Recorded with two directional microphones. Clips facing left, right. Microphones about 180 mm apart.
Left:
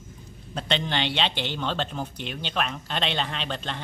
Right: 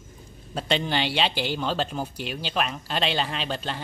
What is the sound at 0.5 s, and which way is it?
Speech, 5° right (ahead or behind).